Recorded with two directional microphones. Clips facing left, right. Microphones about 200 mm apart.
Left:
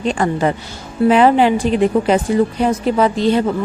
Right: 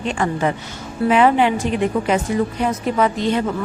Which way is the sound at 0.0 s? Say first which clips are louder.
Left 4 dB; 35° left (ahead or behind).